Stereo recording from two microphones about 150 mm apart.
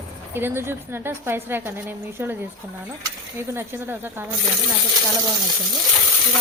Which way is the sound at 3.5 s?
15° right (ahead or behind).